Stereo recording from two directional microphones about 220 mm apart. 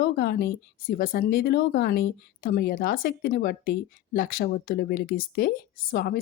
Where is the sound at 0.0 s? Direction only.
45° left (ahead or behind).